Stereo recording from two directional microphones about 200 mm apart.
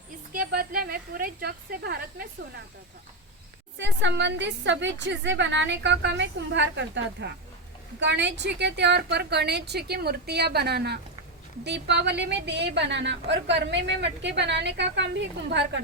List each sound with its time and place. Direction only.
0.3 s a woman's voice: 45° right (ahead or behind)
3.8 s a woman's voice: 65° right (ahead or behind)